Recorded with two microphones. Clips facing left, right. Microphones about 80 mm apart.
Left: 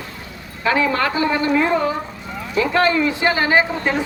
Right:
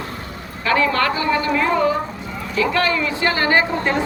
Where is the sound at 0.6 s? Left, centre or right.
Centre.